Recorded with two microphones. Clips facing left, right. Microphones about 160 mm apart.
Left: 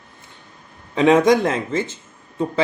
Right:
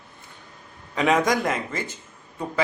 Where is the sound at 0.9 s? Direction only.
25° left (ahead or behind).